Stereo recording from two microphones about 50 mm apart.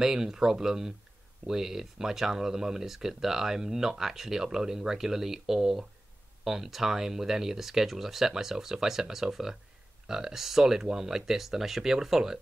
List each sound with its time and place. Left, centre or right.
0.0 s speech: centre